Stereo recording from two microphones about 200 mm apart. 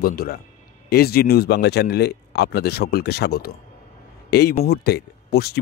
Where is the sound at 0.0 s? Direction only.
50° left (ahead or behind).